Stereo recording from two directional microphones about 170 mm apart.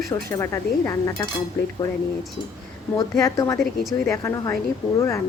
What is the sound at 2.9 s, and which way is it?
A woman's voice, 20° left (ahead or behind).